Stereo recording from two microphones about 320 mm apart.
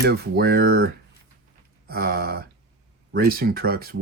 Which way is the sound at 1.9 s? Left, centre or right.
Right.